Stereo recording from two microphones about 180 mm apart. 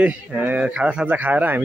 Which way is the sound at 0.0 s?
10° right (ahead or behind).